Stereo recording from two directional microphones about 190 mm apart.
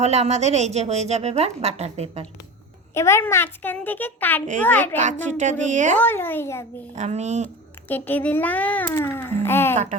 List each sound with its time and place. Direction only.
0.0 s a woman's voice: 35° right (ahead or behind)
2.9 s a child's voice: 15° left (ahead or behind)
5.4 s a woman's voice: 40° right (ahead or behind)
6.0 s a child's voice: 10° left (ahead or behind)
6.9 s a woman's voice: 35° right (ahead or behind)
7.9 s a child's voice: 10° left (ahead or behind)